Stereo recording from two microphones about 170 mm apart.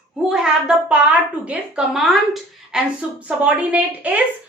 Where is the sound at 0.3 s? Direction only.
5° right (ahead or behind).